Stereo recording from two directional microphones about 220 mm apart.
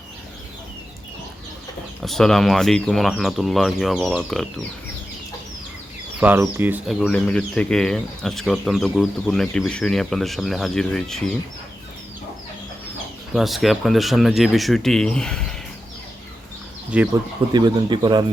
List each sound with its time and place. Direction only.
2.0 s speech: centre (ahead or behind)
6.1 s speech: 10° right (ahead or behind)
13.3 s speech: centre (ahead or behind)
16.9 s speech: 5° right (ahead or behind)
17.5 s a man's voice: 20° right (ahead or behind)